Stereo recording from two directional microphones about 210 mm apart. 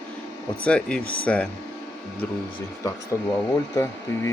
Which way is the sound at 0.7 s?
5° left (ahead or behind).